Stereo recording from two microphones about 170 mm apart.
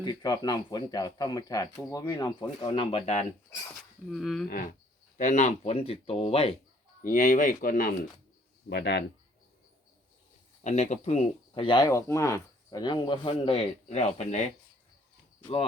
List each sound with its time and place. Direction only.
0.0 s speech: 25° left (ahead or behind)
4.1 s speech: centre (ahead or behind)
4.4 s cricket: 55° left (ahead or behind)
5.1 s speech: 45° left (ahead or behind)
7.0 s speech: 50° left (ahead or behind)
8.7 s a man's voice: 75° left (ahead or behind)
10.6 s speech: 40° left (ahead or behind)